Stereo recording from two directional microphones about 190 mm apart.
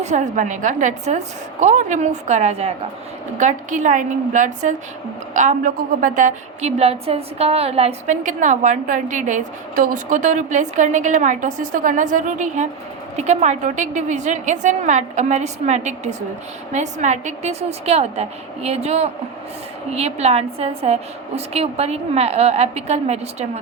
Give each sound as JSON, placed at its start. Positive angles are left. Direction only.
{"t": 0.0, "sound": "a woman's voice", "side_deg": -40}